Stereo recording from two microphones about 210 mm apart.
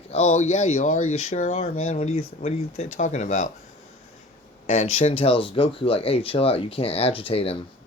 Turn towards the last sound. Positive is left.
turn(degrees=25)  # may be behind; listen again after turning